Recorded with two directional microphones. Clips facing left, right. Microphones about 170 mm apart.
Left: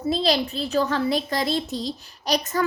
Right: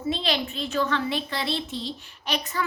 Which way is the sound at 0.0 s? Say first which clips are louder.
Left 5 dB; 40° left (ahead or behind).